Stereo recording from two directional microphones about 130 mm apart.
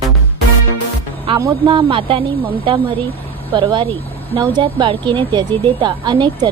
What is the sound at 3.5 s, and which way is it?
A woman's voice, 45° right (ahead or behind).